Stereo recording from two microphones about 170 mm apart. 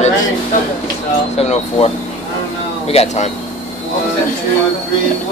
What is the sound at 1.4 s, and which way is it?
Speech, 35° left (ahead or behind).